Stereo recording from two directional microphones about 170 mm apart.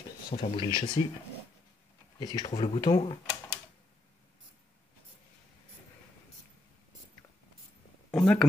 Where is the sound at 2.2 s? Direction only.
25° left (ahead or behind).